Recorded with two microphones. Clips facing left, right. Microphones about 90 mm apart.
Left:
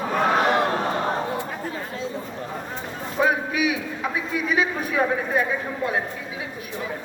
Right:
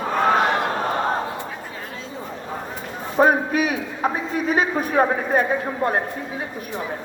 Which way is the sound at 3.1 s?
40° right (ahead or behind).